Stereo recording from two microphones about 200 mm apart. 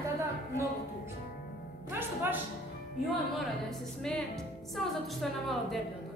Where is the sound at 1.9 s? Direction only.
10° right (ahead or behind).